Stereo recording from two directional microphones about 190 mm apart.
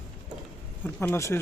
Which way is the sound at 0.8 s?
10° left (ahead or behind).